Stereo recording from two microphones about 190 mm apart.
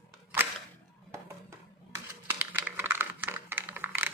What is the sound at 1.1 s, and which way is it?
Computer keyboard, 15° right (ahead or behind).